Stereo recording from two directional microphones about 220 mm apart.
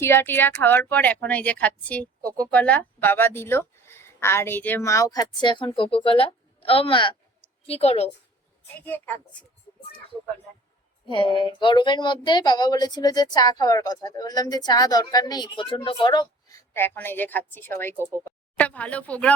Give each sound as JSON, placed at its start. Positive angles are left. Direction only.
{"t": 0.0, "sound": "a woman's voice", "side_deg": 10}
{"t": 8.6, "sound": "speech", "side_deg": 10}
{"t": 11.0, "sound": "a woman's voice", "side_deg": 20}
{"t": 17.9, "sound": "speech", "side_deg": -10}
{"t": 18.3, "sound": "a woman's voice", "side_deg": 5}